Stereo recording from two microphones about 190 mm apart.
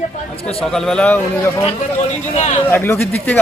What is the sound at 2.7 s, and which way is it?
Speech, 10° left (ahead or behind).